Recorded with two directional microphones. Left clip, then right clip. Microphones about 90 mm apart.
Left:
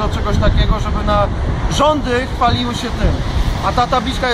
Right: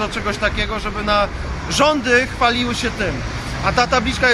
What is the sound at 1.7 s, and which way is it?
Speech, 20° right (ahead or behind).